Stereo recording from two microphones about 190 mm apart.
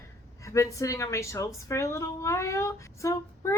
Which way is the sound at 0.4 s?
15° left (ahead or behind).